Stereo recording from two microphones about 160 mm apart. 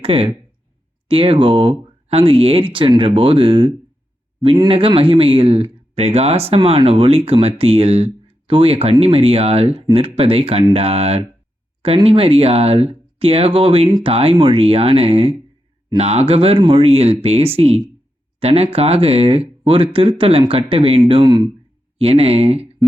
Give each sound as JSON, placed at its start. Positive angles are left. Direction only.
{"t": 0.0, "sound": "speech", "side_deg": -35}